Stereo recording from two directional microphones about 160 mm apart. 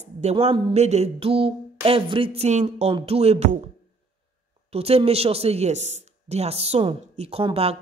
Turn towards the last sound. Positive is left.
turn(degrees=-35)  # may be behind; listen again after turning